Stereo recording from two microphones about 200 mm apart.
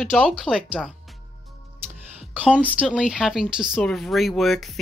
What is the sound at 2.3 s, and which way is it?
Speech, 5° right (ahead or behind).